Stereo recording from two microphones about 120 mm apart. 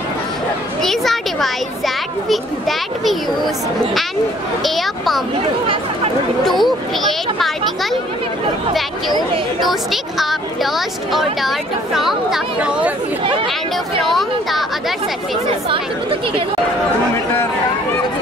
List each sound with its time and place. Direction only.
0.8 s speech: centre (ahead or behind)
4.6 s speech: centre (ahead or behind)
6.4 s speech: centre (ahead or behind)
9.6 s speech: centre (ahead or behind)
14.0 s speech: centre (ahead or behind)
15.7 s speech: 45° right (ahead or behind)